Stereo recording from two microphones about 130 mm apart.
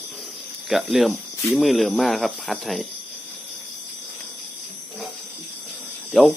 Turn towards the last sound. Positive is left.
turn(degrees=0)  # may be behind; listen again after turning